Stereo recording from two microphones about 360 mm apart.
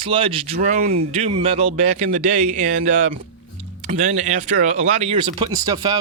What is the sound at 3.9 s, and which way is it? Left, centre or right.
Speech, right.